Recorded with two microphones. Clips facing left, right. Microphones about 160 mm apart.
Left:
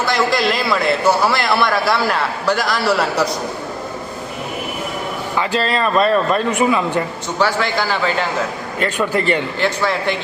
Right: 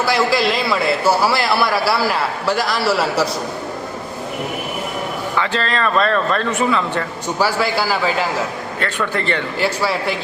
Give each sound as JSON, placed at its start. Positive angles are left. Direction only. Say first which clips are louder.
{"t": 0.0, "sound": "a man's voice", "louder": "right 1 dB", "side_deg": -5}
{"t": 5.4, "sound": "speech", "louder": "left 2 dB", "side_deg": 10}
{"t": 7.3, "sound": "speech", "louder": "even", "side_deg": -10}
{"t": 8.8, "sound": "speech", "louder": "left 4 dB", "side_deg": 15}
{"t": 9.6, "sound": "speech", "louder": "left 1 dB", "side_deg": -10}